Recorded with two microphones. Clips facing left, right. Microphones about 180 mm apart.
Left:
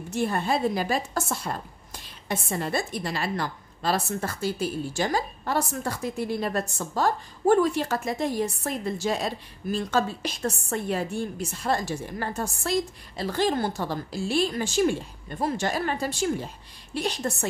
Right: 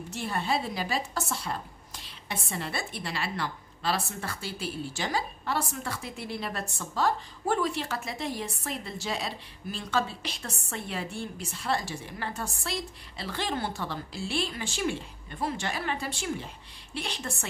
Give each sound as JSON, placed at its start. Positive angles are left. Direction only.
{"t": 0.1, "sound": "a woman's voice", "side_deg": 50}